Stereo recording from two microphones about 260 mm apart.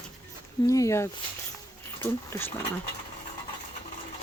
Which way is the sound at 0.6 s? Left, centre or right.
Centre.